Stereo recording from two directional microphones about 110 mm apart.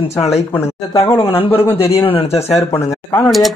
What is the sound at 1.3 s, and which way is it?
A man's voice, 55° left (ahead or behind).